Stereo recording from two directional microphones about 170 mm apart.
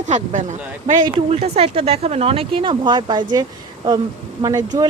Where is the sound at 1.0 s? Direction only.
30° right (ahead or behind).